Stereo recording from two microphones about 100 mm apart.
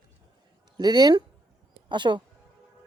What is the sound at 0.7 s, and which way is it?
Speech, 45° right (ahead or behind).